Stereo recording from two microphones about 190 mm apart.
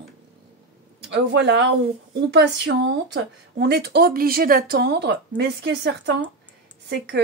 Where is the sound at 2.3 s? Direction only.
65° right (ahead or behind).